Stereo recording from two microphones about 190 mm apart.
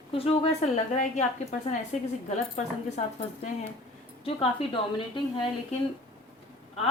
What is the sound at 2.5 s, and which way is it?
A woman's voice, 35° left (ahead or behind).